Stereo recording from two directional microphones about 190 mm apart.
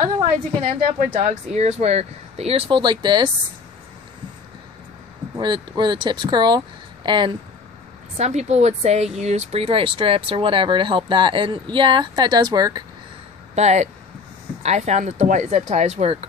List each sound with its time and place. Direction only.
0.0 s speech: 25° right (ahead or behind)
0.9 s speech: 40° right (ahead or behind); by 3.3 s 25° right (ahead or behind)
5.4 s speech: 25° right (ahead or behind)
8.2 s speech: 35° right (ahead or behind); by 12.8 s 20° right (ahead or behind)
13.6 s speech: 35° right (ahead or behind)